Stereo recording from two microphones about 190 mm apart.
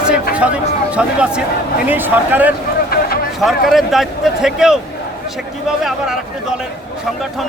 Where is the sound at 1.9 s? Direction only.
10° right (ahead or behind).